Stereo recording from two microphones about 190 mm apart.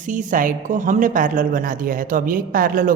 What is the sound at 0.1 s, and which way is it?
A man's voice, 45° right (ahead or behind).